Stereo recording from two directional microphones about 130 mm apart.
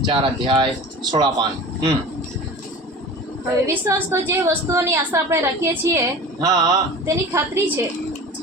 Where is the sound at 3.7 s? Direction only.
20° right (ahead or behind).